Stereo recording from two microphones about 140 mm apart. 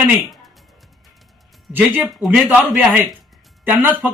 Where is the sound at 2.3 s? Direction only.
15° right (ahead or behind).